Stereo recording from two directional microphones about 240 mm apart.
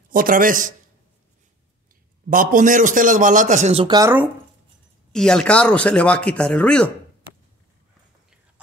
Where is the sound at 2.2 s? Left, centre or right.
Right; by 4.3 s centre.